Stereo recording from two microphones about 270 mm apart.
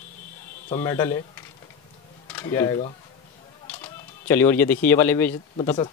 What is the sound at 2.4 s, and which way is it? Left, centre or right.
Speech, centre.